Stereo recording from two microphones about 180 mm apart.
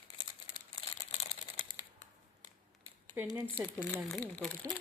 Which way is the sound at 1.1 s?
30° left (ahead or behind).